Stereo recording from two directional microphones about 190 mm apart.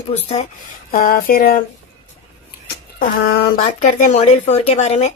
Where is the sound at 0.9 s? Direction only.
50° left (ahead or behind).